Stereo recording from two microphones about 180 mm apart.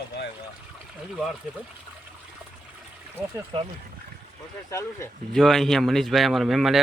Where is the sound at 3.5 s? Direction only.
30° right (ahead or behind).